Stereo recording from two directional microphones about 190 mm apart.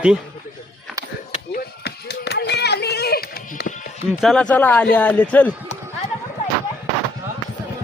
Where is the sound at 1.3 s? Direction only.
55° left (ahead or behind).